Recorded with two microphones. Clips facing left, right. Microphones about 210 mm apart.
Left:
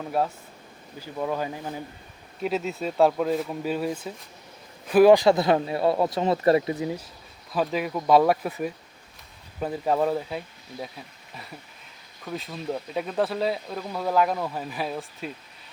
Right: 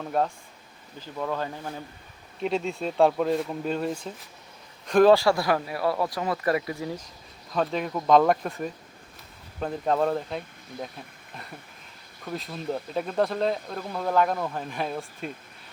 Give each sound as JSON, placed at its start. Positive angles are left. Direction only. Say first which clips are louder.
{"t": 0.2, "sound": "speech", "louder": "even", "side_deg": 5}
{"t": 5.1, "sound": "speech", "louder": "left 3 dB", "side_deg": 20}
{"t": 7.5, "sound": "speech", "louder": "left 1 dB", "side_deg": 5}
{"t": 12.2, "sound": "speech", "louder": "even", "side_deg": 0}